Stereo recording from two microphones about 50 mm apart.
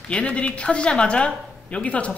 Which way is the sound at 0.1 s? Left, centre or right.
Left.